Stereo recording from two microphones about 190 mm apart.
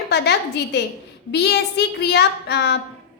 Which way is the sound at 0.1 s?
60° left (ahead or behind).